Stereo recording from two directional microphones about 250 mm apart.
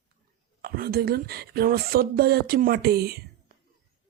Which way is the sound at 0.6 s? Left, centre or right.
Right.